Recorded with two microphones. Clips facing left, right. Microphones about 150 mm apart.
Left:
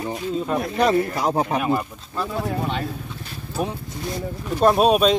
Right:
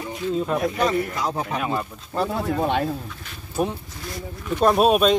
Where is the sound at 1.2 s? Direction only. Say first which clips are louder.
Left 5 dB; 40° left (ahead or behind).